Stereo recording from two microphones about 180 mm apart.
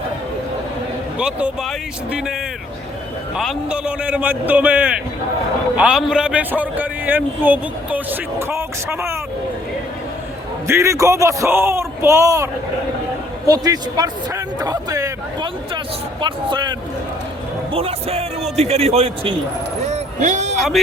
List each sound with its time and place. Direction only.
1.2 s speech: 5° right (ahead or behind)
3.3 s a man's voice: 5° right (ahead or behind)
10.7 s a man's voice: 15° right (ahead or behind)
13.5 s a sound: 20° right (ahead or behind)
16.2 s speech: 25° right (ahead or behind)
19.9 s a sound: 45° right (ahead or behind)